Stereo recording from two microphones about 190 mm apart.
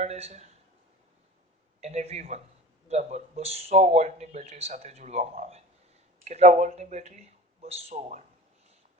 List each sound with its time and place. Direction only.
0.0 s speech: 35° right (ahead or behind)
1.8 s speech: 35° right (ahead or behind)